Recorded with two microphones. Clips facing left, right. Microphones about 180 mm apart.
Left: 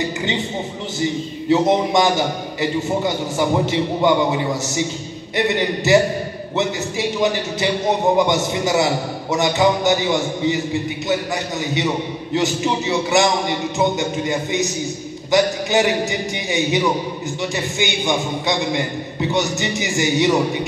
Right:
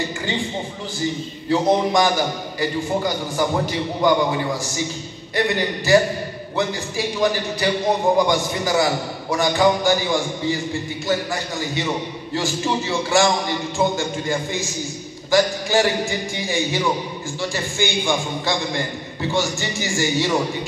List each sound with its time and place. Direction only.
1.5 s a man's voice: 25° left (ahead or behind)
12.4 s a man's voice: 20° left (ahead or behind)